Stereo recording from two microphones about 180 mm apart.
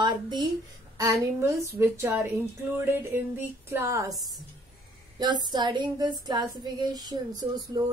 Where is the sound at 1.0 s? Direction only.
20° right (ahead or behind).